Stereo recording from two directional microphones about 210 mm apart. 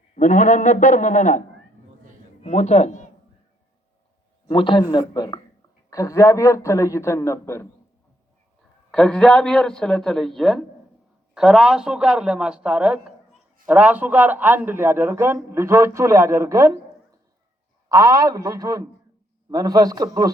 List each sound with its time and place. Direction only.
0.2 s a man's voice: 35° left (ahead or behind)
4.4 s a man's voice: 25° left (ahead or behind)
8.9 s a man's voice: 5° left (ahead or behind); by 20.3 s 15° right (ahead or behind)